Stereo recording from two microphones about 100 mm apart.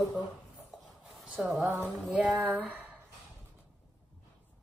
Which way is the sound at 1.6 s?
25° right (ahead or behind).